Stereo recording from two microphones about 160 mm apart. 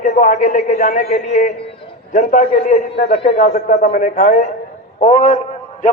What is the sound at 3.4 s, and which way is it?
A man's voice, 50° left (ahead or behind).